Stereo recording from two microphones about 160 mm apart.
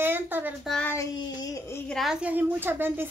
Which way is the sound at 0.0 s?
10° right (ahead or behind).